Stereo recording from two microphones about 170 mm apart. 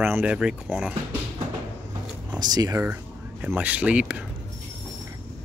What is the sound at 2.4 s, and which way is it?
Speech, 20° right (ahead or behind).